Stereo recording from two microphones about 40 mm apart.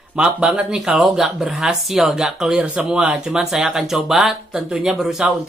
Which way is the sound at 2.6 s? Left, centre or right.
Right.